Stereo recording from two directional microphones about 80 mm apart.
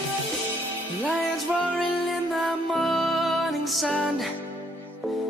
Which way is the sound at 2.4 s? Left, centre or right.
Centre.